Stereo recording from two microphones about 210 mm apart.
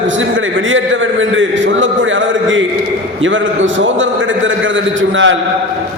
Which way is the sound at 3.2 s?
65° right (ahead or behind).